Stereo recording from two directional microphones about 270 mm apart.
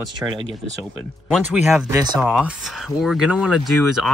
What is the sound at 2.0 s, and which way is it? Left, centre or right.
Speech, centre.